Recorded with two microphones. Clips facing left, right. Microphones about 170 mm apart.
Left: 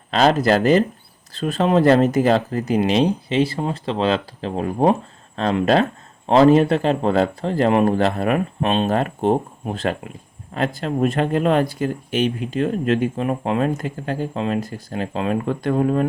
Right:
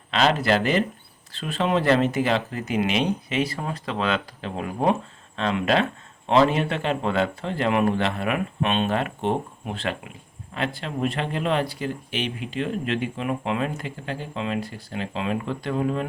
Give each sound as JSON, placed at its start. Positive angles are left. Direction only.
{"t": 0.1, "sound": "speech", "side_deg": 40}